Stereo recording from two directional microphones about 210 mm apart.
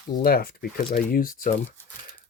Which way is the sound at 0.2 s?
45° left (ahead or behind).